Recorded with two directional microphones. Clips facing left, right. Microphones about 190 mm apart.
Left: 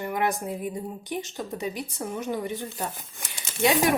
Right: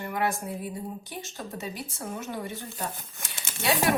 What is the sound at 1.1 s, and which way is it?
Speech, 15° left (ahead or behind).